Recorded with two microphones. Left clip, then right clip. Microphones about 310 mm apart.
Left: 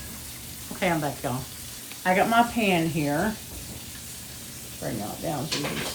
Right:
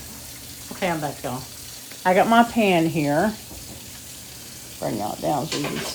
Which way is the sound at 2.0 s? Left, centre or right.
Right.